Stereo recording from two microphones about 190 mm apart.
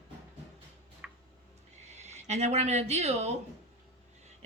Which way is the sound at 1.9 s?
35° right (ahead or behind).